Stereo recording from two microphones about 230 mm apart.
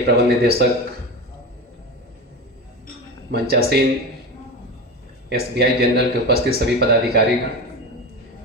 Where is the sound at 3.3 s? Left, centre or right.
Right.